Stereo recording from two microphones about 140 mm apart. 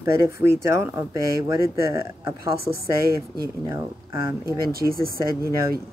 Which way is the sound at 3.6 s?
20° right (ahead or behind).